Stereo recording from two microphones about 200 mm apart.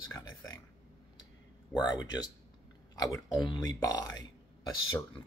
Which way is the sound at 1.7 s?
10° left (ahead or behind).